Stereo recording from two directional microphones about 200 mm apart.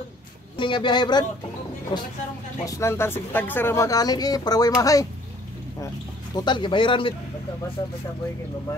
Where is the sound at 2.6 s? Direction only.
15° left (ahead or behind).